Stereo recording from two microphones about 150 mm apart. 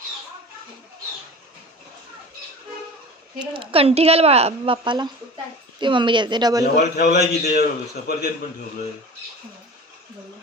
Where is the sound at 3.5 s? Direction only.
35° right (ahead or behind).